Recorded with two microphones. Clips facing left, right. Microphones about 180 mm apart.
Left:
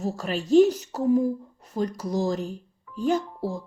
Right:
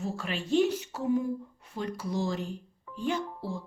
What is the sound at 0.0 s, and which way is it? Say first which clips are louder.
Music: left 5 dB; 40° left (ahead or behind).